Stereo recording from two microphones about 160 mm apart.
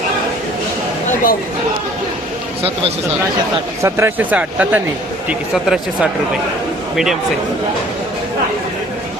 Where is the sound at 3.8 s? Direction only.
15° right (ahead or behind).